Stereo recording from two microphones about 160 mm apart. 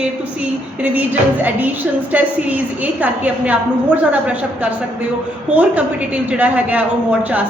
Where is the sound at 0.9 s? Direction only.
10° right (ahead or behind).